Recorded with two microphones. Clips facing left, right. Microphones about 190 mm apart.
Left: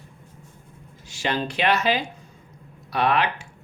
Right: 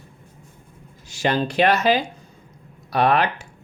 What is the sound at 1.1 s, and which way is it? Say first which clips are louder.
Speech: right 5 dB; 40° right (ahead or behind).